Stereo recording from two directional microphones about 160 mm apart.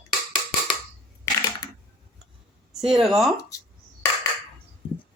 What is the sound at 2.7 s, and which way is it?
Speech, 5° right (ahead or behind).